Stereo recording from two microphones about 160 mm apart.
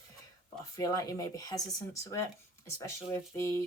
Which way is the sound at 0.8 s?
20° left (ahead or behind).